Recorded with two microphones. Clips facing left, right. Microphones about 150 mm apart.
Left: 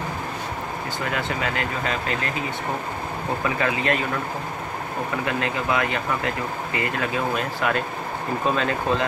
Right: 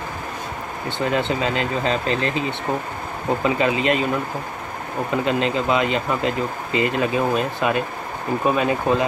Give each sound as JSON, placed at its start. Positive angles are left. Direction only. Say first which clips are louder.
{"t": 0.9, "sound": "speech", "louder": "right 7 dB", "side_deg": -25}
{"t": 3.4, "sound": "speech", "louder": "right 4 dB", "side_deg": -20}